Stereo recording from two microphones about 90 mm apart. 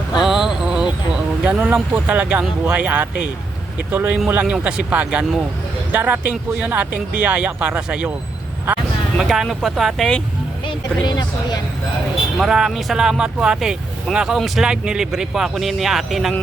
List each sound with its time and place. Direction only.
0.2 s vehicle: 5° right (ahead or behind)
1.5 s speech: 10° right (ahead or behind)
9.1 s speech: 5° right (ahead or behind)
10.7 s speech: 50° left (ahead or behind)
12.4 s speech: 5° right (ahead or behind)